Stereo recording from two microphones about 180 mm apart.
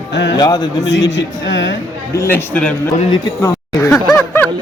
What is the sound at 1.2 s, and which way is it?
Speech, 90° left.